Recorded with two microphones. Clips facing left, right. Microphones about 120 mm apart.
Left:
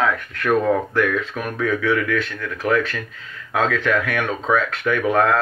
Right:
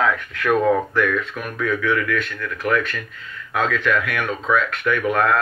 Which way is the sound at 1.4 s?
30° left (ahead or behind).